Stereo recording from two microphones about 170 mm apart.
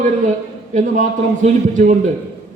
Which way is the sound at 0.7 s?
45° right (ahead or behind).